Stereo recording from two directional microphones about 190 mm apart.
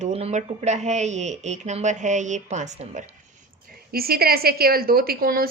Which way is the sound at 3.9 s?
50° right (ahead or behind).